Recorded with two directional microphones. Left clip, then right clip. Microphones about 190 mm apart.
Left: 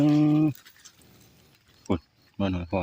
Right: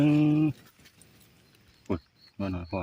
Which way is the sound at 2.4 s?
35° left (ahead or behind).